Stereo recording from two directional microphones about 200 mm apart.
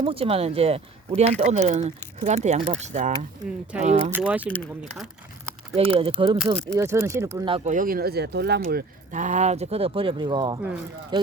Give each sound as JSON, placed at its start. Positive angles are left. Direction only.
{"t": 0.0, "sound": "speech", "side_deg": -30}
{"t": 4.1, "sound": "speech", "side_deg": -5}
{"t": 4.4, "sound": "speech", "side_deg": 5}
{"t": 5.7, "sound": "speech", "side_deg": -30}
{"t": 6.7, "sound": "speech", "side_deg": -15}
{"t": 7.4, "sound": "speech", "side_deg": -30}
{"t": 9.1, "sound": "speech", "side_deg": -35}